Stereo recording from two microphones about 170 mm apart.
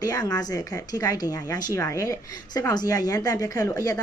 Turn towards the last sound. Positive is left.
turn(degrees=20)  # may be behind; listen again after turning